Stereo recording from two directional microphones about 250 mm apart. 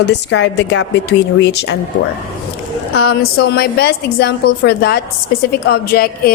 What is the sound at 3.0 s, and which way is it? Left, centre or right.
A woman's voice, left.